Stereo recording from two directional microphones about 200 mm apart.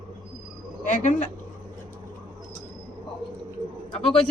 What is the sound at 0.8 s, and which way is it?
Speech, 35° left (ahead or behind).